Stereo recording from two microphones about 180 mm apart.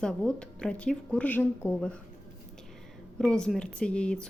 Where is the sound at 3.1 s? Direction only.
5° left (ahead or behind).